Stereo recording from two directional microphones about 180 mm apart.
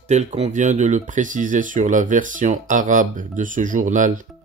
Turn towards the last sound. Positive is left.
turn(degrees=-45)  # may be behind; listen again after turning